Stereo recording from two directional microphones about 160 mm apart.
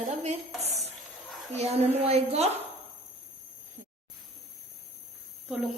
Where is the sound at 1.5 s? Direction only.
40° right (ahead or behind).